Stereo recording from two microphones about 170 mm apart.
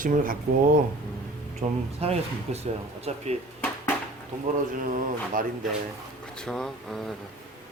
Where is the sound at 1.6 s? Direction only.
35° right (ahead or behind).